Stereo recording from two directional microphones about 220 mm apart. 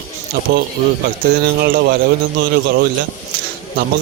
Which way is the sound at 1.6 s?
45° right (ahead or behind).